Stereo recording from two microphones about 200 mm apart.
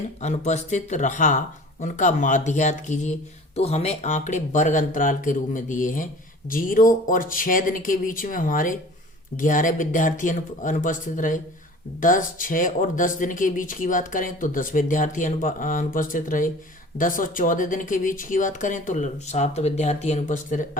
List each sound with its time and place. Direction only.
0.2 s speech: 35° left (ahead or behind)